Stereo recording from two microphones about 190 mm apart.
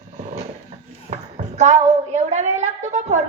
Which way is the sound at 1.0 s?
35° right (ahead or behind).